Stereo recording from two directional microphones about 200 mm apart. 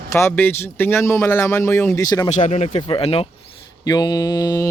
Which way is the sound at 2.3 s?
35° left (ahead or behind).